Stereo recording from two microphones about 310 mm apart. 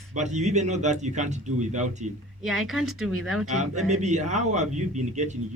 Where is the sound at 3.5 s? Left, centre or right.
Right.